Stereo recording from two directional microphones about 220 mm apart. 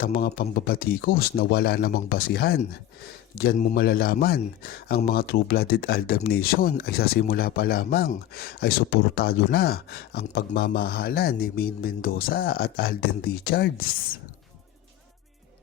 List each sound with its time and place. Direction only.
0.0 s speech: 40° left (ahead or behind)